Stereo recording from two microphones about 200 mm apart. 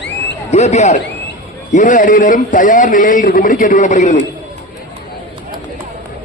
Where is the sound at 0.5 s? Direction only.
35° left (ahead or behind).